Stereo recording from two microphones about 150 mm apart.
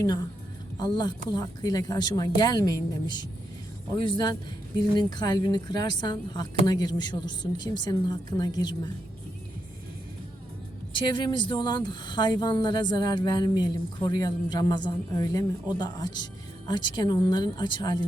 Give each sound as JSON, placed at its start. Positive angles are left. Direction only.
{"t": 0.0, "sound": "speech", "side_deg": 25}
{"t": 10.9, "sound": "speech", "side_deg": 30}